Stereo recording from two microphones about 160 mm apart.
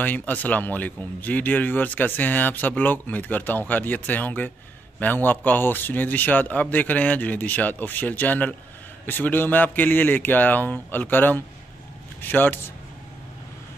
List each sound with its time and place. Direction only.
0.0 s speech: 10° left (ahead or behind)